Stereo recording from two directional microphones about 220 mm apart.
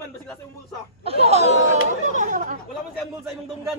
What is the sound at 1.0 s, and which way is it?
Laughter, 25° right (ahead or behind).